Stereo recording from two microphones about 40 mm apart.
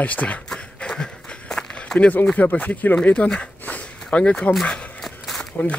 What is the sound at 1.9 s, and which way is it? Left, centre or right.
Speech, centre.